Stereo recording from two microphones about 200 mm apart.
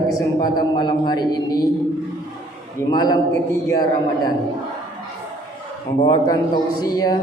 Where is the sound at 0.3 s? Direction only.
20° left (ahead or behind).